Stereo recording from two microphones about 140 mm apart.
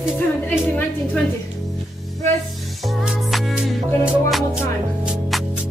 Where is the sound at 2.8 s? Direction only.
Centre (ahead or behind).